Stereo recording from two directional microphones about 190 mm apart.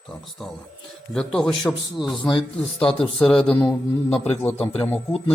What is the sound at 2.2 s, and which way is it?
Speech, 25° left (ahead or behind).